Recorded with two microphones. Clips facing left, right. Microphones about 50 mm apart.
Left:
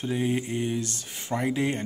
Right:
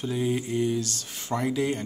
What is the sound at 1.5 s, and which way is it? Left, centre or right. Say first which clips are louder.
Speech: even; left.